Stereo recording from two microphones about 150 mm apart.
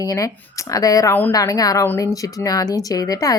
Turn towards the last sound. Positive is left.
turn(degrees=25)  # may be behind; listen again after turning